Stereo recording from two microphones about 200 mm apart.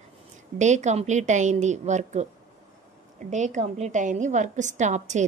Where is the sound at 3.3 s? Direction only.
35° right (ahead or behind).